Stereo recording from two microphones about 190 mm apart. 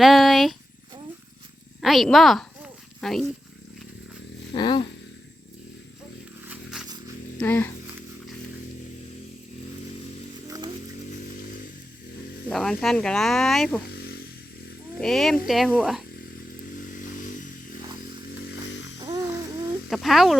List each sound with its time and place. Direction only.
0.0 s speech: centre (ahead or behind)
1.8 s speech: centre (ahead or behind)
4.5 s a sound: 25° left (ahead or behind)
6.4 s a sound: 5° right (ahead or behind)
7.3 s speech: 10° left (ahead or behind)
12.5 s speech: 5° left (ahead or behind)
14.9 s speech: centre (ahead or behind)
19.0 s music: 15° right (ahead or behind)
19.9 s speech: centre (ahead or behind)